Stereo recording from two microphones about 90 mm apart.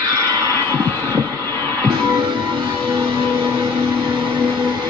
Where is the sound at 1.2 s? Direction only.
25° left (ahead or behind).